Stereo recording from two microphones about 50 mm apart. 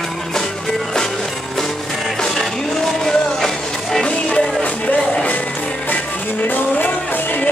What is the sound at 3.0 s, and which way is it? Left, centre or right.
Music, centre.